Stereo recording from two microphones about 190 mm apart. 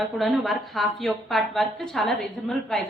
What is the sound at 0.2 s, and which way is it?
A woman's voice, centre (ahead or behind).